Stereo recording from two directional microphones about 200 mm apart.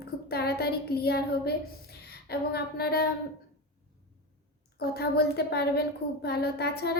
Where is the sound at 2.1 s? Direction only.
50° left (ahead or behind).